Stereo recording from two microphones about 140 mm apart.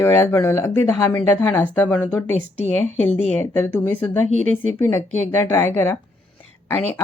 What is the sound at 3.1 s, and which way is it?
Speech, 50° left (ahead or behind).